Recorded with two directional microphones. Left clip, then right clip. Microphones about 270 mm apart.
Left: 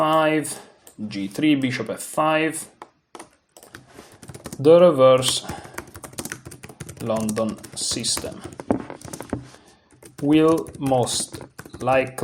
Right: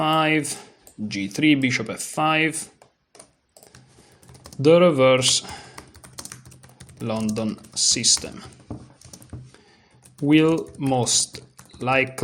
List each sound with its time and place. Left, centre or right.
0.0 s a sound: right
1.0 s speech: right
4.6 s speech: right
7.1 s speech: right
10.2 s speech: right